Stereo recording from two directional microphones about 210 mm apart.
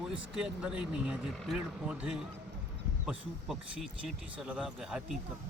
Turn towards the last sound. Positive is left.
turn(degrees=0)  # may be behind; listen again after turning